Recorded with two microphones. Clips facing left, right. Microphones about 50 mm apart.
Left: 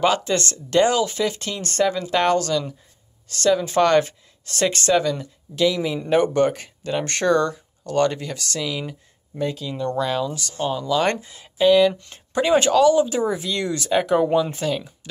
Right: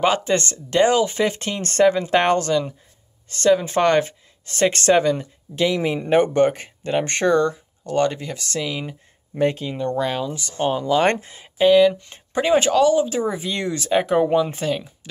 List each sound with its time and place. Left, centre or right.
0.0 s speech: right
1.9 s speech: right
4.7 s speech: right
5.0 s speech: right
9.3 s speech: right
9.7 s speech: right
10.6 s speech: right; by 13.4 s centre
13.4 s speech: centre